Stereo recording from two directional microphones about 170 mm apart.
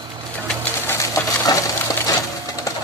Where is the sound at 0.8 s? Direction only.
20° left (ahead or behind).